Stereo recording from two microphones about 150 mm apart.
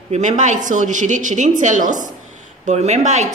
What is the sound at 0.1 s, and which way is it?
A woman's voice, 50° right (ahead or behind).